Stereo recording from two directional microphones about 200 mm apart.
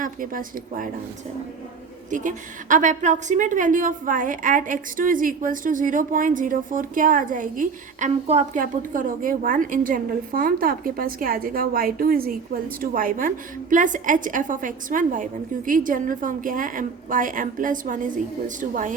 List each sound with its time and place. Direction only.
0.0 s speech: 45° right (ahead or behind)
2.0 s a woman's voice: 40° right (ahead or behind)